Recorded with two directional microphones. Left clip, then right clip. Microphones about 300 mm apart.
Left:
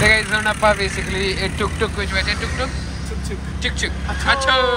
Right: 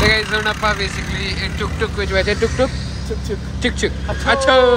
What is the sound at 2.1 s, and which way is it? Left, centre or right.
Speech, centre.